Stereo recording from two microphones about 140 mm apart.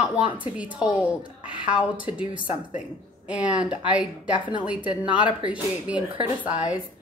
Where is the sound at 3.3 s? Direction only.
10° right (ahead or behind).